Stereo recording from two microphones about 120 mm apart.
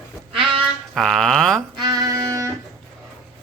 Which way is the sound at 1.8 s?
35° right (ahead or behind).